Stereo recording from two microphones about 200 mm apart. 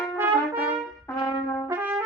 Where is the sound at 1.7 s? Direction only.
10° right (ahead or behind).